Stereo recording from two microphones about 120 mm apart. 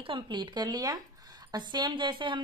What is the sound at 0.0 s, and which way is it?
A woman's voice, 45° right (ahead or behind).